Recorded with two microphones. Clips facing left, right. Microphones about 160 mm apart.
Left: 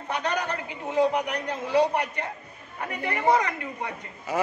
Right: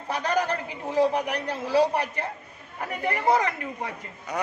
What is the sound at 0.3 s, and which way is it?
Speech, 35° right (ahead or behind).